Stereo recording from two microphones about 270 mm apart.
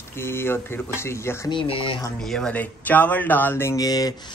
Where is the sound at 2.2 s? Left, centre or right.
Centre.